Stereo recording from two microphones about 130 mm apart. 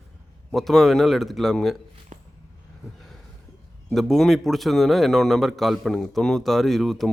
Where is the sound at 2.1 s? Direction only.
60° right (ahead or behind).